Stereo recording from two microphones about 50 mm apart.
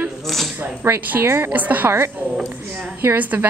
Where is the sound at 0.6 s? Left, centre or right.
Right.